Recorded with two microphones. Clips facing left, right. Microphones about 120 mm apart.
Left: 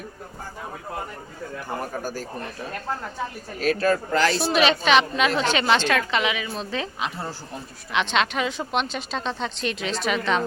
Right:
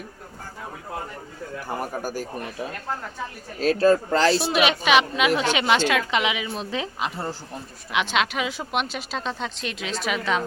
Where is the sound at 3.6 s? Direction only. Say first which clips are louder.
Right 3 dB; 30° right (ahead or behind).